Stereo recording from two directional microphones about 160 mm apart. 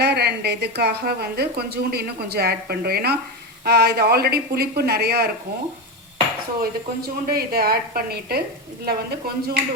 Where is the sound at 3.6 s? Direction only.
90° right.